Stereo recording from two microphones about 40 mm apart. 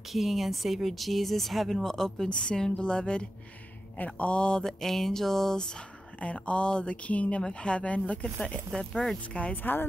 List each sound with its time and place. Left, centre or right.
0.1 s speech: centre
2.2 s speech: left
4.6 s speech: centre
6.4 s speech: left
9.5 s a woman's voice: left